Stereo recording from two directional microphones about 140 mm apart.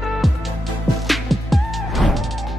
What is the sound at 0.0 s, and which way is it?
Music, centre (ahead or behind).